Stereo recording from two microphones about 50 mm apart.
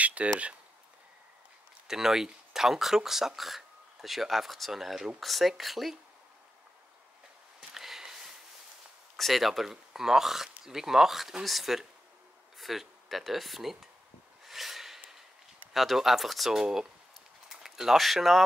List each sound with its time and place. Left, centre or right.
0.0 s a sound: right
1.9 s speech: centre
7.7 s sniff: centre
9.1 s speech: centre
14.4 s snort: centre
15.7 s speech: centre